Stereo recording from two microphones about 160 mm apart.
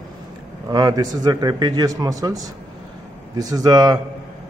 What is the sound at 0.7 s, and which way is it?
A man's voice, 25° right (ahead or behind).